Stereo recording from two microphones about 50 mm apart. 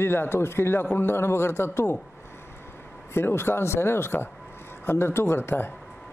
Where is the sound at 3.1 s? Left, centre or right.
Left.